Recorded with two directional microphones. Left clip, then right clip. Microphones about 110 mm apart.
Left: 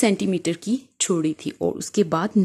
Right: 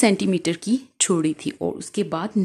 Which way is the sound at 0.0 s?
30° left (ahead or behind).